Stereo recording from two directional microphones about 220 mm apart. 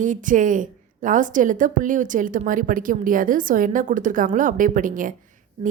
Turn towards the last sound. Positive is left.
turn(degrees=-35)  # may be behind; listen again after turning